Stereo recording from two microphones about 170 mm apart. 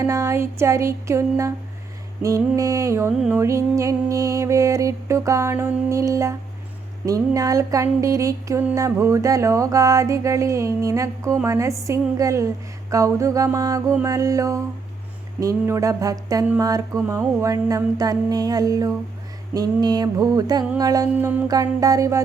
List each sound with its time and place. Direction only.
0.0 s music: 15° right (ahead or behind)